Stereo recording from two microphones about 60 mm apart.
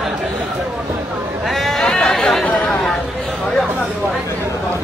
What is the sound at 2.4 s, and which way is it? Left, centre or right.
Chatter, left.